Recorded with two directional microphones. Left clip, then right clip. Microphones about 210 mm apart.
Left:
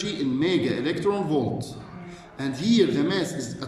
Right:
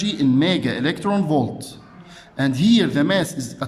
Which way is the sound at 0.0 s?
50° right (ahead or behind).